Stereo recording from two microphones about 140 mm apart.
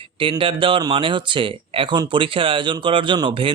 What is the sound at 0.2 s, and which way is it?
Speech, 40° right (ahead or behind).